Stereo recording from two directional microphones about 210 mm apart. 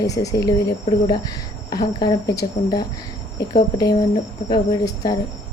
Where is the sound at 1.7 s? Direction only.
20° left (ahead or behind).